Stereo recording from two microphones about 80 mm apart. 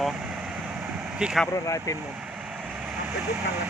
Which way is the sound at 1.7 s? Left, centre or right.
Left.